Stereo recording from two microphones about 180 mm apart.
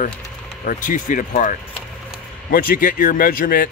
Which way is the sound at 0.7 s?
45° left (ahead or behind).